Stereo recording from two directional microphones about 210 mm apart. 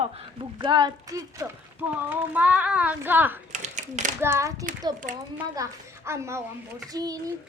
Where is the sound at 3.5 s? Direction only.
35° right (ahead or behind).